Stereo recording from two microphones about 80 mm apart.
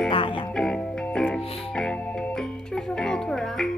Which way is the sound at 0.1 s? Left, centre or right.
Left.